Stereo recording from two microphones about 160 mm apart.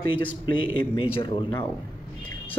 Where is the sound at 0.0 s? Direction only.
30° left (ahead or behind).